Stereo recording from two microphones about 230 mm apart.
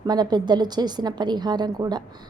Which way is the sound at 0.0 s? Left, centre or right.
Centre.